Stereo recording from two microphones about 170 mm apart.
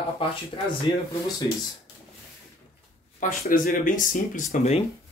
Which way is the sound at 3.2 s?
50° left (ahead or behind).